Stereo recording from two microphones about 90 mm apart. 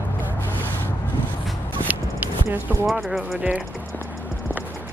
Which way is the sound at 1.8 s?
20° right (ahead or behind).